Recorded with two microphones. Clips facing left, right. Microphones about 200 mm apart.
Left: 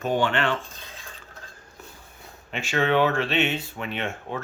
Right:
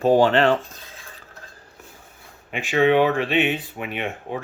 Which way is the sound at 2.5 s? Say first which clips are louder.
Right 5 dB; 15° right (ahead or behind).